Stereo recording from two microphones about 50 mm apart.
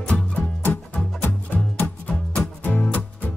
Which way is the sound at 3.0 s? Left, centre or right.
Left.